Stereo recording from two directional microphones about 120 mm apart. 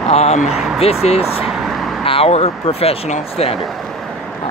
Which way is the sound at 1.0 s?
60° left (ahead or behind).